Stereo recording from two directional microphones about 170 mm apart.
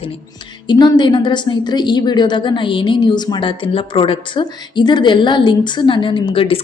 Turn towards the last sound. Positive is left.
turn(degrees=35)  # may be behind; listen again after turning